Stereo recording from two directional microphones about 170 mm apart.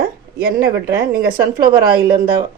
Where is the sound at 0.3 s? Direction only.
70° right (ahead or behind).